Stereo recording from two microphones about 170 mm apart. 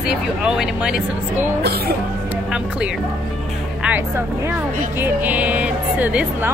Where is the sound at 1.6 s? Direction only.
70° right (ahead or behind).